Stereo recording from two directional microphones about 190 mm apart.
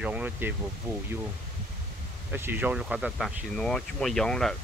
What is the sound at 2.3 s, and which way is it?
Speech, 10° right (ahead or behind).